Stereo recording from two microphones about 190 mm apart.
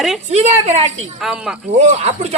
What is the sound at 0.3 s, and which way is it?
Speech, 35° right (ahead or behind).